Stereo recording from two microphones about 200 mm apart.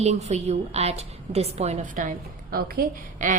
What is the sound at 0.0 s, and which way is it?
A woman's voice, 35° right (ahead or behind).